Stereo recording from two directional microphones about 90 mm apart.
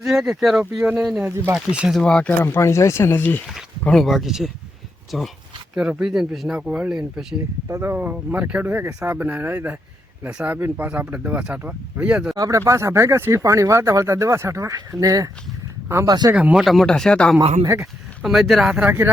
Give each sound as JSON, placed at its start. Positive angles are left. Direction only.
{"t": 0.0, "sound": "speech", "side_deg": -5}
{"t": 2.0, "sound": "speech", "side_deg": 10}
{"t": 2.4, "sound": "speech", "side_deg": 30}
{"t": 3.8, "sound": "speech", "side_deg": 5}
{"t": 5.7, "sound": "speech", "side_deg": -10}
{"t": 7.7, "sound": "speech", "side_deg": -25}
{"t": 12.4, "sound": "speech", "side_deg": -35}
{"t": 16.3, "sound": "speech", "side_deg": -15}
{"t": 16.6, "sound": "speech", "side_deg": 5}
{"t": 18.2, "sound": "speech", "side_deg": -5}
{"t": 18.9, "sound": "speech", "side_deg": -25}